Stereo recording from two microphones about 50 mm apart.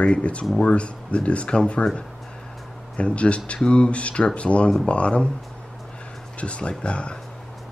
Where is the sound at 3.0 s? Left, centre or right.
Left.